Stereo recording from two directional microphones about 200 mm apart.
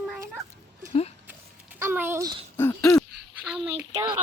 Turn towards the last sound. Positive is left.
turn(degrees=-10)  # may be behind; listen again after turning